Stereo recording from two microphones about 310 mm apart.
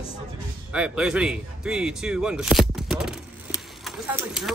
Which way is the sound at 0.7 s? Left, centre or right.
Centre.